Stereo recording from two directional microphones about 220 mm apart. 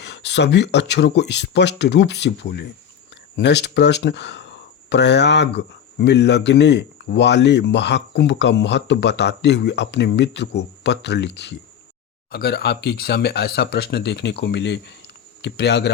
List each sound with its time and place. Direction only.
0.0 s speech: 50° left (ahead or behind)